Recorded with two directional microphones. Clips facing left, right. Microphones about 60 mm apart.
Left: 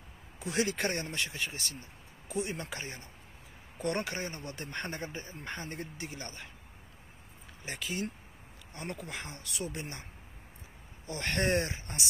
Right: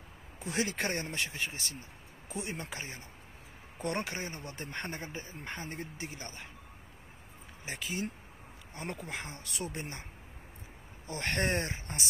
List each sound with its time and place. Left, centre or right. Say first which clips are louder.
0.4 s speech: left 2 dB; right
7.6 s speech: left 1 dB; centre
11.1 s speech: left 1 dB; right